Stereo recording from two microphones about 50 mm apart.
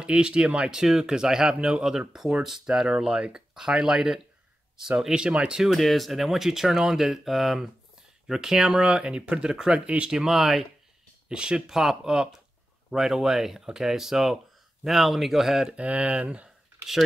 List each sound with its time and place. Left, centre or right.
0.0 s speech: centre
5.6 s speech: centre
9.8 s speech: right
10.1 s speech: centre
15.7 s speech: right